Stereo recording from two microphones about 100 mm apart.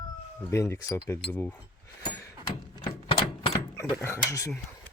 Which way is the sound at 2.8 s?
65° left (ahead or behind).